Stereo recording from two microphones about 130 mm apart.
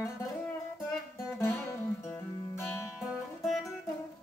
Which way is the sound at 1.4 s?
20° left (ahead or behind).